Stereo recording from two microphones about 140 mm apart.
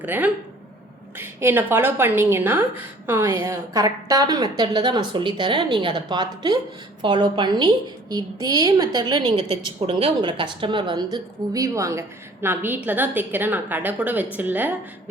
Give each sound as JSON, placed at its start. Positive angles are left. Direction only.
{"t": 0.0, "sound": "a woman's voice", "side_deg": -10}